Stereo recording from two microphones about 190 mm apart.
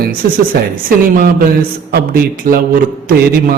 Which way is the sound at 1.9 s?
50° right (ahead or behind).